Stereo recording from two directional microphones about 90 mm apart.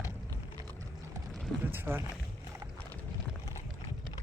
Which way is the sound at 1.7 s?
25° right (ahead or behind).